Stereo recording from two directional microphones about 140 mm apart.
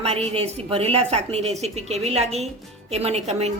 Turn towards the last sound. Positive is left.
turn(degrees=-50)  # may be behind; listen again after turning